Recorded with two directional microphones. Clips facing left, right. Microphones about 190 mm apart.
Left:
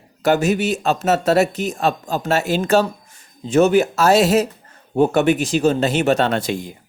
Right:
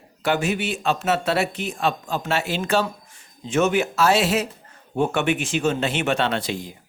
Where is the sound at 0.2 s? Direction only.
40° left (ahead or behind).